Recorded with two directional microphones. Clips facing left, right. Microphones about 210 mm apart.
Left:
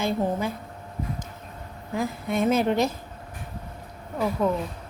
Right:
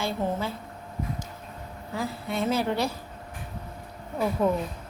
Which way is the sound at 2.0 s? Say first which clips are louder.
Left 4 dB; 20° left (ahead or behind).